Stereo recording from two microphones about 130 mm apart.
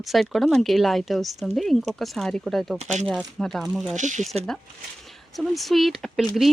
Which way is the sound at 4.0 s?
70° right (ahead or behind).